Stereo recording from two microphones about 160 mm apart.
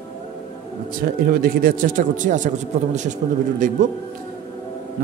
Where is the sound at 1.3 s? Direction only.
65° right (ahead or behind).